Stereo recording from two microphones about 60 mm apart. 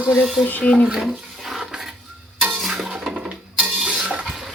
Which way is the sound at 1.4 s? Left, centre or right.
Centre.